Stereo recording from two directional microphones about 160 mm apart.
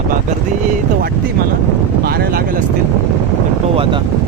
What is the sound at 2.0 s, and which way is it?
Speech, 70° right (ahead or behind).